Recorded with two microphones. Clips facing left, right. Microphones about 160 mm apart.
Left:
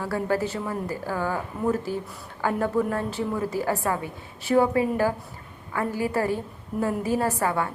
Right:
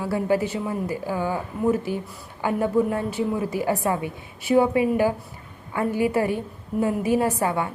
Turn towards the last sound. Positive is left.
turn(degrees=-20)  # may be behind; listen again after turning